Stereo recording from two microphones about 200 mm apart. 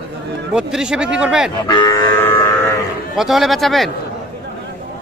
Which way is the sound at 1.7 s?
20° left (ahead or behind).